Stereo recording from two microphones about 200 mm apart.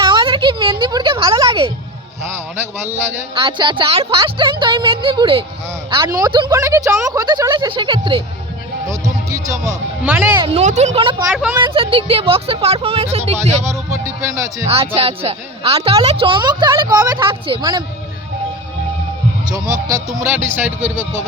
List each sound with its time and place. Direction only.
0.0 s a sound: 25° right (ahead or behind)
2.2 s speech: 10° right (ahead or behind)
3.4 s speech: 25° right (ahead or behind); by 10.2 s 5° right (ahead or behind)
10.3 s speech: 25° right (ahead or behind)
13.9 s speech: 15° right (ahead or behind)
14.7 s speech: 30° right (ahead or behind)
20.2 s speech: 10° right (ahead or behind)